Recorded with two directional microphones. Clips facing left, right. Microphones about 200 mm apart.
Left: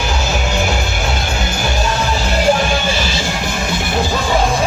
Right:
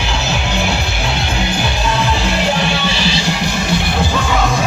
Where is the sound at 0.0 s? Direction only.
45° left (ahead or behind).